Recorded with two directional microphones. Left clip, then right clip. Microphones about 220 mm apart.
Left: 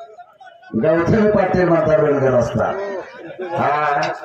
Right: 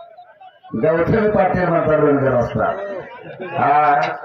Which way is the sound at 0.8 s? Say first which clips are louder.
Even; 45° left (ahead or behind).